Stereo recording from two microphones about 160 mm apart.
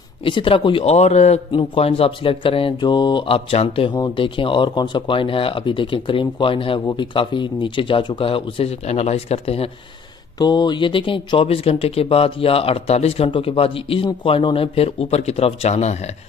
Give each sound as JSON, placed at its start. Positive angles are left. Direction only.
{"t": 0.2, "sound": "speech", "side_deg": 35}
{"t": 10.4, "sound": "speech", "side_deg": 25}